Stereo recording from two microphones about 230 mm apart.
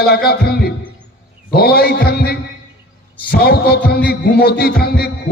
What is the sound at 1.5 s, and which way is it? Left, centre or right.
Heart sounds, left.